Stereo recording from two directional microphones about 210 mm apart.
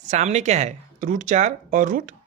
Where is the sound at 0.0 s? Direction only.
35° right (ahead or behind).